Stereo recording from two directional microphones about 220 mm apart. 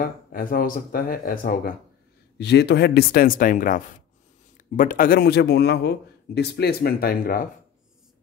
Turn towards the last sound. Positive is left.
turn(degrees=40)  # may be behind; listen again after turning